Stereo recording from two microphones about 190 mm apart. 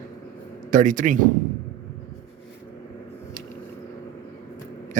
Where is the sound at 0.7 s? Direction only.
40° right (ahead or behind).